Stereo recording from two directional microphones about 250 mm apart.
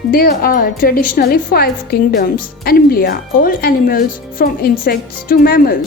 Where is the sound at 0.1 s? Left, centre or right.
Left.